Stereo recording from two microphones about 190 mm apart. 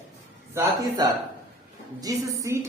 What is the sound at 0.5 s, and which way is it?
A man's voice, 15° right (ahead or behind).